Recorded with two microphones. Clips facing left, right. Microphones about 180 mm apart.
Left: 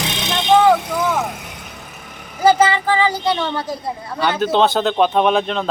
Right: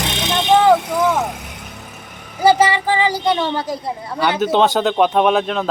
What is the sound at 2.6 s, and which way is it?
Child singing, 15° right (ahead or behind).